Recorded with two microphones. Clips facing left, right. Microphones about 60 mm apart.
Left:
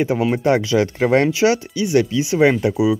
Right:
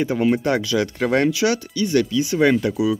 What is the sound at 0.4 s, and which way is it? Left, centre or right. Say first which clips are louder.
Speech: left 4 dB; left.